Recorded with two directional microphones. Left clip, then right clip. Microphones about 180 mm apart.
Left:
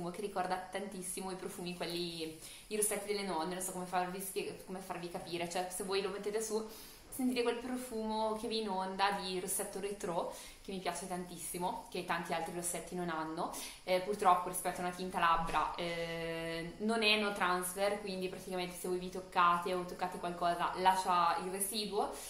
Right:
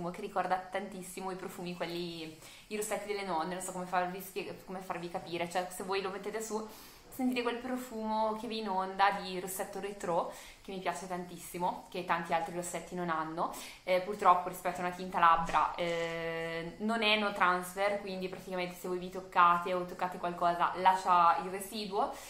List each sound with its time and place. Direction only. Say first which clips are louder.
0.0 s a woman's voice: right 3 dB; centre (ahead or behind)